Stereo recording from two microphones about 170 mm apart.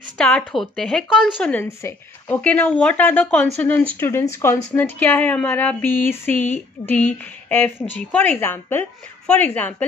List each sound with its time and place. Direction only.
0.2 s speech: 5° left (ahead or behind)